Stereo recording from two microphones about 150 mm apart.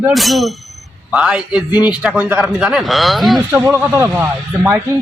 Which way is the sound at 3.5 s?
15° right (ahead or behind).